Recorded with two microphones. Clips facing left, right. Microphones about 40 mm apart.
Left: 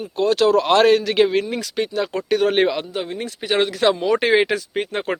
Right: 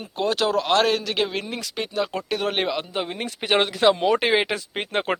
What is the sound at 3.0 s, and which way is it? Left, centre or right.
Speech, right.